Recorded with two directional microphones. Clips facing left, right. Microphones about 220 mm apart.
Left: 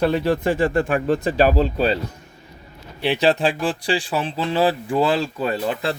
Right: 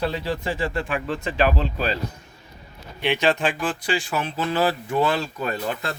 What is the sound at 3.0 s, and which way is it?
Speech, 35° left (ahead or behind).